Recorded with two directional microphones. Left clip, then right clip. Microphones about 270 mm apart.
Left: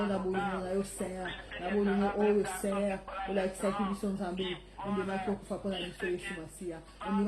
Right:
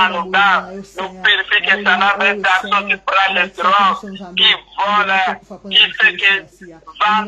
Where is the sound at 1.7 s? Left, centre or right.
Right.